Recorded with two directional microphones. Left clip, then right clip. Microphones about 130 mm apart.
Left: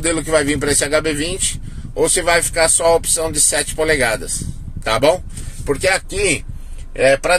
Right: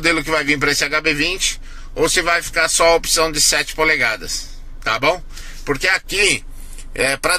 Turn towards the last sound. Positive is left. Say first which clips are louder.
# left 4 dB
turn(degrees=-10)  # may be behind; listen again after turning